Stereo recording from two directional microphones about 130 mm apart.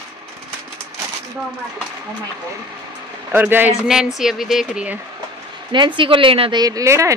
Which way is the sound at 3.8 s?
5° right (ahead or behind).